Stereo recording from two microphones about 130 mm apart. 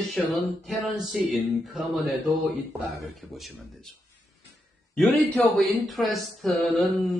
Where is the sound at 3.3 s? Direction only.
Centre (ahead or behind).